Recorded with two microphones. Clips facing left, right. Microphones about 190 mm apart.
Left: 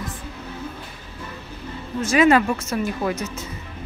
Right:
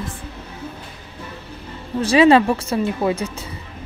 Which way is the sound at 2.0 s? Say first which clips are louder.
Right 4 dB; 30° right (ahead or behind).